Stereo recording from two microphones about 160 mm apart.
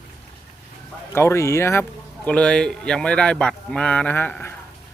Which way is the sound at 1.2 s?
15° left (ahead or behind).